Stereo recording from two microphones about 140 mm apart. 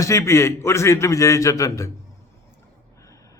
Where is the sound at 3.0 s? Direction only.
25° left (ahead or behind).